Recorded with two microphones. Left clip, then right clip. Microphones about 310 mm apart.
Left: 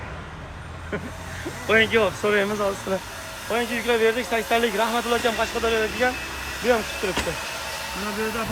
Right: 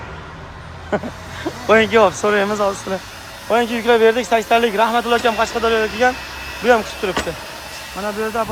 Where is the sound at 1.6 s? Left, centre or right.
Centre.